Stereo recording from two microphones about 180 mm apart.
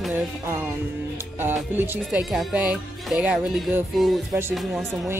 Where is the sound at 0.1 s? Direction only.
10° right (ahead or behind).